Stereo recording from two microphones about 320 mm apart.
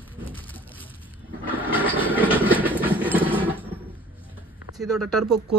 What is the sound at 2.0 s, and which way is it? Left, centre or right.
Train, centre.